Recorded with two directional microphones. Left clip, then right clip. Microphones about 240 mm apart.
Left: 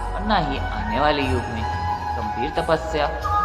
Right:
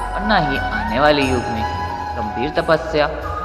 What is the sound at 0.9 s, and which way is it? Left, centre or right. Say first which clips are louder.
Speech: right 5 dB; centre.